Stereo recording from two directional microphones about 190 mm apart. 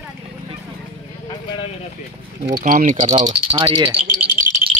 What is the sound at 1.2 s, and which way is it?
Speech, 25° left (ahead or behind).